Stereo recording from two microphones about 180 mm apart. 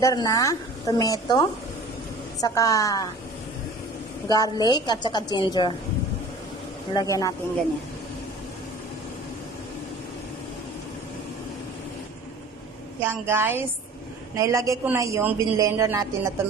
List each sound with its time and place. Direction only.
0.0 s a woman's voice: 20° left (ahead or behind)
4.3 s a woman's voice: 20° left (ahead or behind)
6.9 s a woman's voice: 20° left (ahead or behind)
13.0 s a woman's voice: 15° right (ahead or behind)